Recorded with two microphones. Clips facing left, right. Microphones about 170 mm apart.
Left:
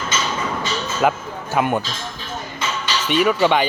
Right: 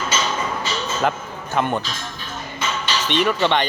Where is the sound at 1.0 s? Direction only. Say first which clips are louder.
Left 6 dB; 10° left (ahead or behind).